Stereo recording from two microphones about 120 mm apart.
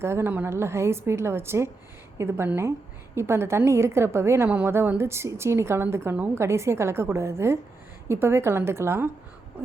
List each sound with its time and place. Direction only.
0.0 s a woman's voice: 20° right (ahead or behind)